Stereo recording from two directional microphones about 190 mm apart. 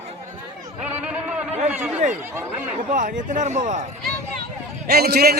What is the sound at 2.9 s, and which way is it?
Speech, 40° right (ahead or behind).